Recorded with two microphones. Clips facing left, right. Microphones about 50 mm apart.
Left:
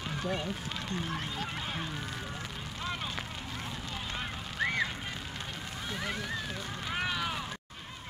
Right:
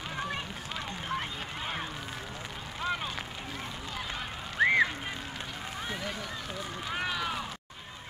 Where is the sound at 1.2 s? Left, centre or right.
Centre.